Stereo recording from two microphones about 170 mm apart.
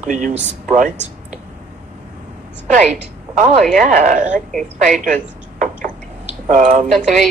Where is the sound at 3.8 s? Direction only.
50° right (ahead or behind).